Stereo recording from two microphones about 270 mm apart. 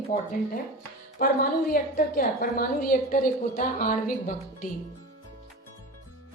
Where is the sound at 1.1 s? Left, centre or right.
Left.